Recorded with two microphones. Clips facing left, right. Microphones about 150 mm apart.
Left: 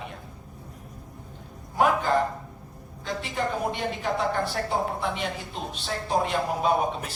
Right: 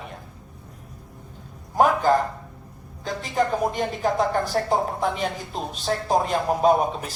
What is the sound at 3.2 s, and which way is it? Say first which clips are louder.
Speech: right 6 dB; 40° right (ahead or behind).